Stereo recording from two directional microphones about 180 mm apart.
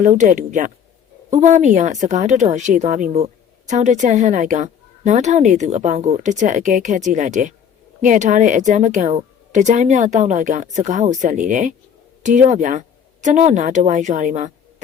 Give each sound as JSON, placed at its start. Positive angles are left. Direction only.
{"t": 0.0, "sound": "a woman's voice", "side_deg": -45}